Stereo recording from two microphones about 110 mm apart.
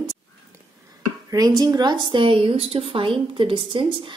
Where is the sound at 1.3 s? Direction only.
35° right (ahead or behind).